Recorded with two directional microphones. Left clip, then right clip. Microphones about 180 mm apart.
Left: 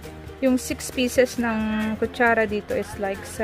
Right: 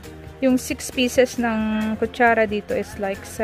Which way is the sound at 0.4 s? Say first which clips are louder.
Right 2 dB; 15° right (ahead or behind).